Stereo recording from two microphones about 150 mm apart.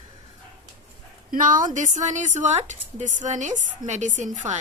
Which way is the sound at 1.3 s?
60° right (ahead or behind).